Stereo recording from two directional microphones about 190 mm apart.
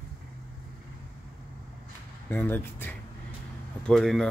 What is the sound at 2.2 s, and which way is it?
Speech, 10° left (ahead or behind).